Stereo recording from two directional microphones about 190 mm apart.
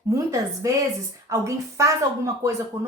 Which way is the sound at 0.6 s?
15° right (ahead or behind).